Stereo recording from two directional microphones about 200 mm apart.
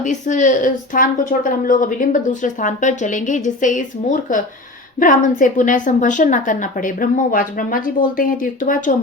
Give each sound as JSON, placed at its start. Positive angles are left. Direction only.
{"t": 0.0, "sound": "a woman's voice", "side_deg": 40}